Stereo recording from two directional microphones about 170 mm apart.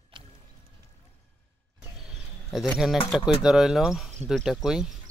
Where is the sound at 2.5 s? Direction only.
Centre (ahead or behind).